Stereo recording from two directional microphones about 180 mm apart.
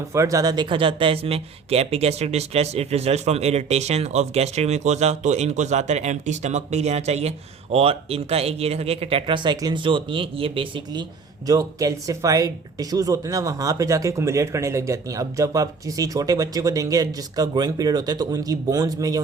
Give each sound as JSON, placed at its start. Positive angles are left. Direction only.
{"t": 0.1, "sound": "speech", "side_deg": -15}
{"t": 11.4, "sound": "speech", "side_deg": -20}